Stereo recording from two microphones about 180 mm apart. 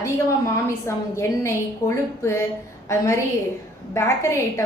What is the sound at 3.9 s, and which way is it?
Speech, 15° left (ahead or behind).